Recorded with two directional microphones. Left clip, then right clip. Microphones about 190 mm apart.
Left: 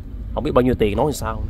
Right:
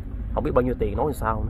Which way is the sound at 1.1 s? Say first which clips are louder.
Left 1 dB; 15° left (ahead or behind).